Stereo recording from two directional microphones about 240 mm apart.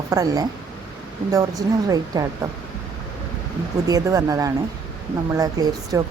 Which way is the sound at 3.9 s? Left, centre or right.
Centre.